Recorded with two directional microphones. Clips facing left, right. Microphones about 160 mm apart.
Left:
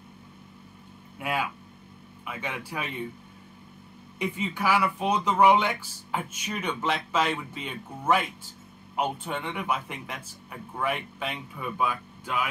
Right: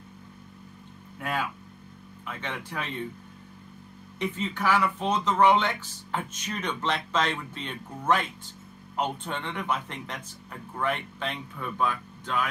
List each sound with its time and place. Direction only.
1.2 s speech: 10° left (ahead or behind)
4.2 s speech: 10° left (ahead or behind)